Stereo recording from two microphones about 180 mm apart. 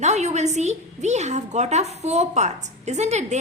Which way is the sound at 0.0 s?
40° right (ahead or behind).